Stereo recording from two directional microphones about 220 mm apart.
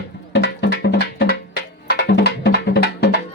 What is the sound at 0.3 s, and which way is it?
Music, 50° left (ahead or behind).